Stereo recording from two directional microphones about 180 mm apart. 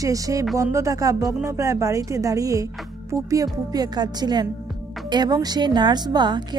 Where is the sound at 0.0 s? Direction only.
20° right (ahead or behind).